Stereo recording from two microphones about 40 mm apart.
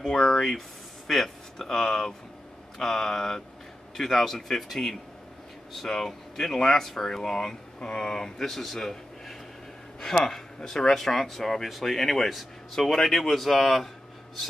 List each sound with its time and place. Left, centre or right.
0.0 s speech: centre
8.4 s a man's voice: centre